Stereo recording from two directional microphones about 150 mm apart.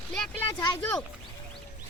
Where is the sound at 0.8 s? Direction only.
10° left (ahead or behind).